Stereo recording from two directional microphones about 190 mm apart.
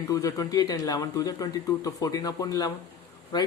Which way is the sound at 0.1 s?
20° left (ahead or behind).